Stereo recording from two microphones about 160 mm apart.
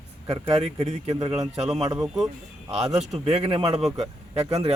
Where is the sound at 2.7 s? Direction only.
45° right (ahead or behind).